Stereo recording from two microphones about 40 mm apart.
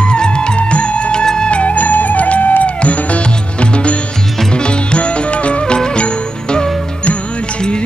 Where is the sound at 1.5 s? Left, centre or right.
Left.